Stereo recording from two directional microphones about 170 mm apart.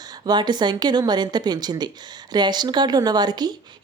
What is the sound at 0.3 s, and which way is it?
A woman's voice, 25° right (ahead or behind).